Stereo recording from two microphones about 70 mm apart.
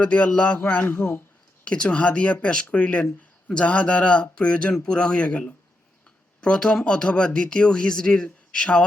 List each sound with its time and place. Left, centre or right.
0.0 s speech: centre
1.6 s speech: centre